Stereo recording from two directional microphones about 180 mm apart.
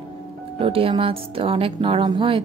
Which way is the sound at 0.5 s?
30° right (ahead or behind).